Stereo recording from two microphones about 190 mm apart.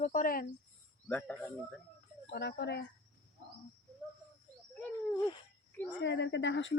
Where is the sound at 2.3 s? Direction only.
60° left (ahead or behind).